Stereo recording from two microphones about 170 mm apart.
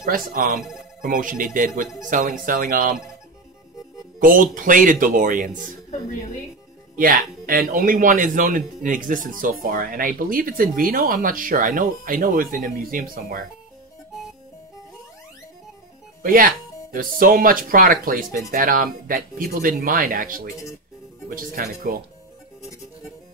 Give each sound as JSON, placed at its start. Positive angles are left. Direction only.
{"t": 0.0, "sound": "speech", "side_deg": -55}
{"t": 4.2, "sound": "speech", "side_deg": -55}
{"t": 7.4, "sound": "speech", "side_deg": -55}
{"t": 16.2, "sound": "speech", "side_deg": -55}